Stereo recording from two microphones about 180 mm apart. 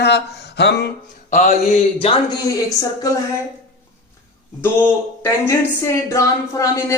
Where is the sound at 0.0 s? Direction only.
65° left (ahead or behind).